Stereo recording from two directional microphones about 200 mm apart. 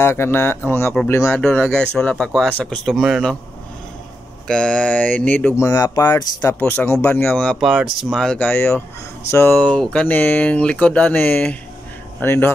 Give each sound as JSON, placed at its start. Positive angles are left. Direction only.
{"t": 0.0, "sound": "speech", "side_deg": 10}
{"t": 4.5, "sound": "speech", "side_deg": 5}
{"t": 5.7, "sound": "speech", "side_deg": 20}
{"t": 6.6, "sound": "speech", "side_deg": 10}